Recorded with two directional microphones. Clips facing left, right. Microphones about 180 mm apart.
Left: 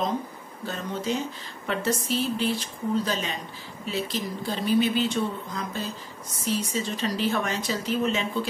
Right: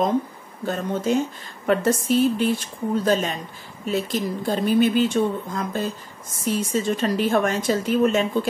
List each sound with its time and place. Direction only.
0.7 s a woman's voice: 50° right (ahead or behind)